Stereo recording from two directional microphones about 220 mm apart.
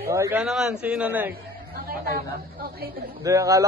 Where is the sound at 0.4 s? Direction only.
Centre (ahead or behind).